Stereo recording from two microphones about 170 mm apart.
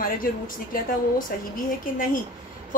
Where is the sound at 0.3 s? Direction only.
55° left (ahead or behind).